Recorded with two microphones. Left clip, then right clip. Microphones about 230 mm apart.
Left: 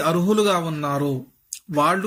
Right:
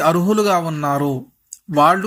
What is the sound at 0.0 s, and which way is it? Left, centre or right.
Speech, centre.